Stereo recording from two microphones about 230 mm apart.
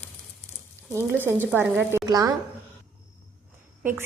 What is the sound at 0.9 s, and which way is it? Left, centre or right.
A woman's voice, centre.